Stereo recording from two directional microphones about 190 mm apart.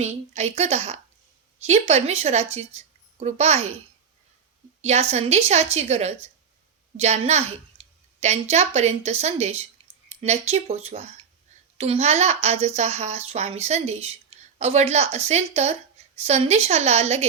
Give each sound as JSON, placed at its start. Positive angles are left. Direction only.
{"t": 0.0, "sound": "speech", "side_deg": -35}
{"t": 4.8, "sound": "a woman's voice", "side_deg": -35}